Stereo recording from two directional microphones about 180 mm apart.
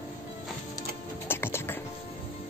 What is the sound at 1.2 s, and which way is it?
Music, 15° left (ahead or behind).